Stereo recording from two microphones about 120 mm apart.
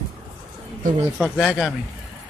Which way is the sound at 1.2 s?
Centre (ahead or behind).